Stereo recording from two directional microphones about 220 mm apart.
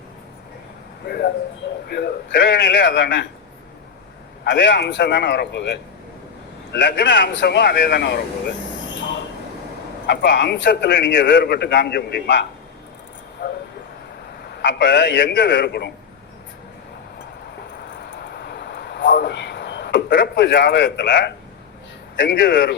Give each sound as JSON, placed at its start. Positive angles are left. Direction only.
{"t": 1.0, "sound": "a man's voice", "side_deg": 45}
{"t": 4.4, "sound": "a man's voice", "side_deg": 55}
{"t": 10.1, "sound": "a man's voice", "side_deg": 50}
{"t": 14.6, "sound": "a man's voice", "side_deg": 55}
{"t": 18.2, "sound": "a sound", "side_deg": 50}
{"t": 22.1, "sound": "a man's voice", "side_deg": 55}